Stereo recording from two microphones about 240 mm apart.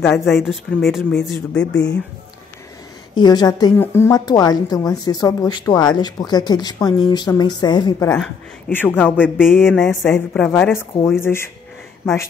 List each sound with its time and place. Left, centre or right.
0.0 s speech: centre
3.2 s a woman's voice: centre